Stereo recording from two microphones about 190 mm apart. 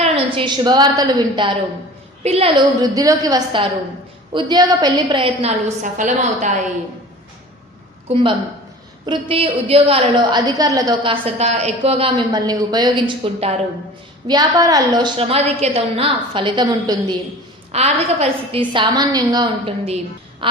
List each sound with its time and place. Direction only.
0.0 s a woman's voice: 25° right (ahead or behind)
2.9 s a woman's voice: 20° right (ahead or behind); by 6.5 s 40° right (ahead or behind)
8.0 s a woman's voice: 25° right (ahead or behind)
17.7 s a woman's voice: 35° right (ahead or behind)
18.7 s a woman's voice: 25° right (ahead or behind)